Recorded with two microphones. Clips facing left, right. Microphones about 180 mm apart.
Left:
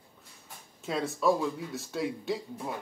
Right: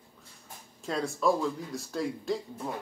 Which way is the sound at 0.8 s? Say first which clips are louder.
Even; centre (ahead or behind).